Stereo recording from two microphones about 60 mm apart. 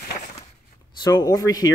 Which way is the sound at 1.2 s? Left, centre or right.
Left.